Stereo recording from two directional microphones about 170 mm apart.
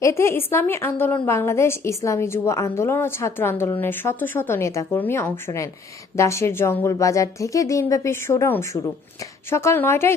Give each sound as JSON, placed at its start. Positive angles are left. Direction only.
{"t": 0.0, "sound": "a woman's voice", "side_deg": 15}